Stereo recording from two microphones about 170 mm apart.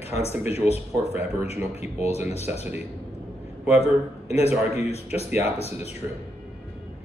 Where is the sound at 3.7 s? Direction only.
40° left (ahead or behind).